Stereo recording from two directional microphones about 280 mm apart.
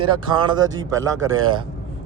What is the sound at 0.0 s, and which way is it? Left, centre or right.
Speech, centre.